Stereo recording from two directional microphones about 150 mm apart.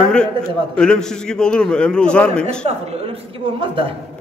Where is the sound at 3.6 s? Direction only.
35° right (ahead or behind).